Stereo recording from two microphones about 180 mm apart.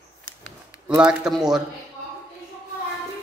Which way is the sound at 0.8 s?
5° right (ahead or behind).